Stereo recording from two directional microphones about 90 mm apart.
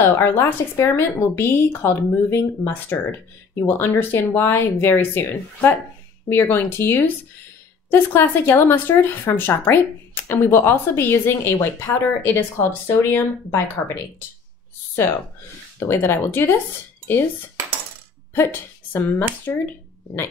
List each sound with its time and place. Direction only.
0.0 s speech: 25° left (ahead or behind)
18.3 s speech: 25° left (ahead or behind)